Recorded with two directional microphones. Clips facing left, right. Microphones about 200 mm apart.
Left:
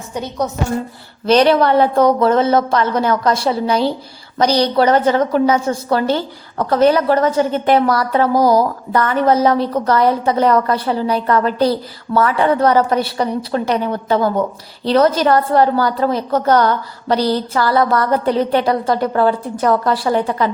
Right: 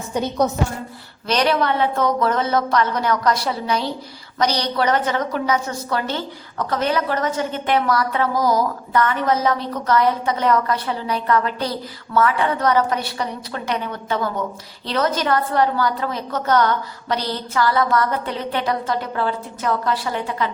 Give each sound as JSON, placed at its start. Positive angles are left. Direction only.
{"t": 1.3, "sound": "a woman's voice", "side_deg": 30}